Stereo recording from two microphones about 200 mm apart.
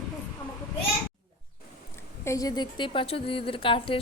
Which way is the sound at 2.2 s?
20° left (ahead or behind).